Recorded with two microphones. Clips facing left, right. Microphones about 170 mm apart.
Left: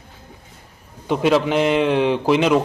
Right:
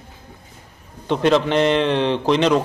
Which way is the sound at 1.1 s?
5° left (ahead or behind).